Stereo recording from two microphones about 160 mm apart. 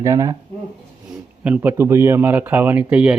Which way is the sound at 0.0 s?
20° right (ahead or behind).